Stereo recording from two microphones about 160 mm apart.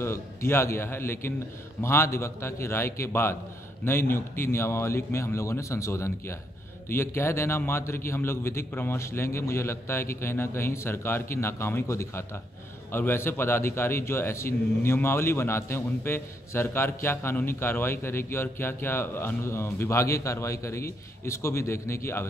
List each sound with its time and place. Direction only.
0.0 s a man's voice: 15° left (ahead or behind)